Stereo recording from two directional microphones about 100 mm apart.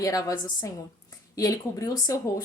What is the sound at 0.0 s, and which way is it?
A woman's voice, 35° left (ahead or behind).